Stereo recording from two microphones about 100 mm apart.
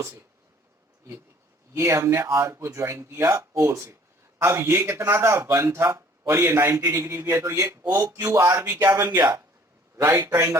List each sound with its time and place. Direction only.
0.0 s speech: 25° right (ahead or behind)
1.7 s speech: 30° right (ahead or behind)